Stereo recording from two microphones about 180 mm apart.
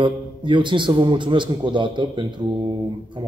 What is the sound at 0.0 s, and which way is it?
A man's voice, 25° right (ahead or behind).